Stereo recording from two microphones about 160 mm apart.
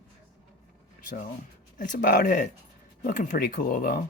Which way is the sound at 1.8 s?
55° left (ahead or behind).